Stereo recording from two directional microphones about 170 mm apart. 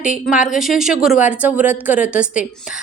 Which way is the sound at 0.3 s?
5° right (ahead or behind).